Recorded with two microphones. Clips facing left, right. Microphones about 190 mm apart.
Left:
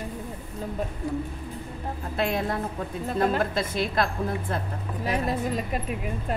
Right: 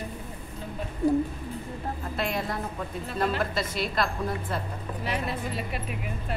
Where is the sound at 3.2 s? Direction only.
50° left (ahead or behind).